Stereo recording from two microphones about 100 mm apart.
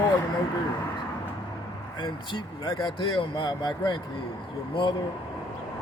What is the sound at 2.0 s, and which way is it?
Speech, 55° left (ahead or behind).